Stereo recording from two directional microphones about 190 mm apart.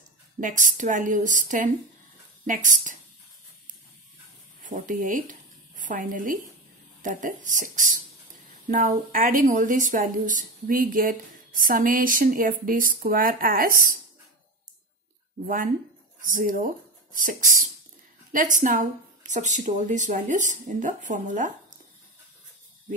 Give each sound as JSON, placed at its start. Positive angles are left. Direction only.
{"t": 0.4, "sound": "a woman's voice", "side_deg": -40}
{"t": 4.6, "sound": "a woman's voice", "side_deg": -45}
{"t": 15.4, "sound": "a woman's voice", "side_deg": -45}